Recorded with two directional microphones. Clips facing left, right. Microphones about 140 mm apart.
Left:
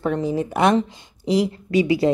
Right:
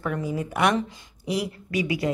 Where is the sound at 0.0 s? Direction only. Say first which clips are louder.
Left 6 dB; 25° left (ahead or behind).